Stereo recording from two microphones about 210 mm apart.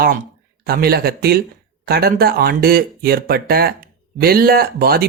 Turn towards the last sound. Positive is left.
turn(degrees=-45)  # may be behind; listen again after turning